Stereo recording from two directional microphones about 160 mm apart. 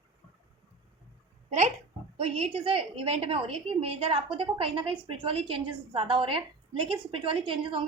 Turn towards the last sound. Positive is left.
turn(degrees=-30)  # may be behind; listen again after turning